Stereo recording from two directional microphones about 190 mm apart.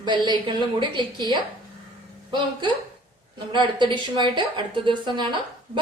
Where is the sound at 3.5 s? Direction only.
25° right (ahead or behind).